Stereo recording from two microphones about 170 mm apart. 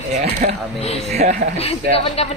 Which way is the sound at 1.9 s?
35° left (ahead or behind).